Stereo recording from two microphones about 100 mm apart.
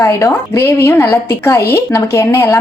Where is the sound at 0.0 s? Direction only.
30° left (ahead or behind).